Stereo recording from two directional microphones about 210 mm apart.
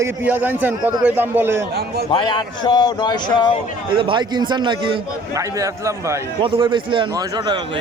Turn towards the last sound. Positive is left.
turn(degrees=-20)  # may be behind; listen again after turning